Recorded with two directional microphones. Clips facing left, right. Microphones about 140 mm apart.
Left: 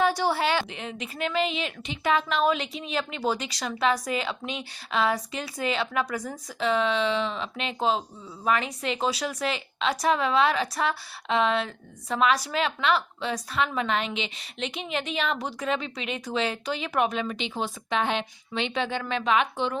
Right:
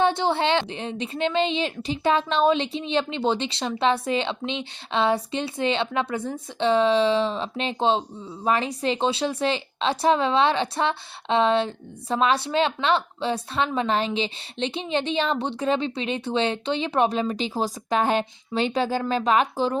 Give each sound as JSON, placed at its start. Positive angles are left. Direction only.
{"t": 0.0, "sound": "speech", "side_deg": -25}